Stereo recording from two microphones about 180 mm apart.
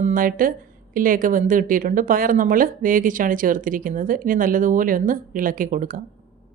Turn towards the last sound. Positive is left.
turn(degrees=-50)  # may be behind; listen again after turning